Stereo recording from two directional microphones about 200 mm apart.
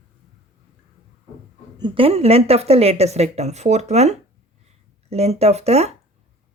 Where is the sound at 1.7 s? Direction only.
25° right (ahead or behind).